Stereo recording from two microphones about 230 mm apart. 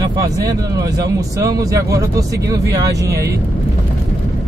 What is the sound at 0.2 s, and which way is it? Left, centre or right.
Speech, centre.